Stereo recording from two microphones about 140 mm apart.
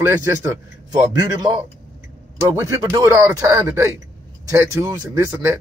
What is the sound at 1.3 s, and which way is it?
Speech, 30° right (ahead or behind).